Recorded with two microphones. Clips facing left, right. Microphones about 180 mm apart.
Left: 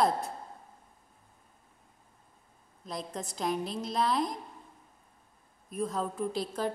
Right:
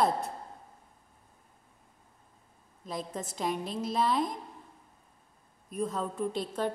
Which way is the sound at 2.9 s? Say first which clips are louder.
Right 1 dB; 5° right (ahead or behind).